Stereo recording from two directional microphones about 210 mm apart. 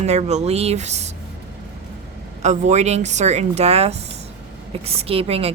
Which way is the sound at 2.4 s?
35° right (ahead or behind).